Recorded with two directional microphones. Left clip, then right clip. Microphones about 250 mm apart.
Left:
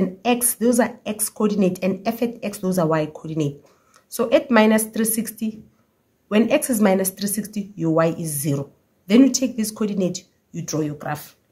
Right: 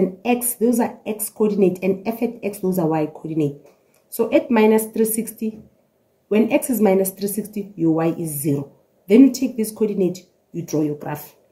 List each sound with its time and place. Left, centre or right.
0.2 s a woman's voice: left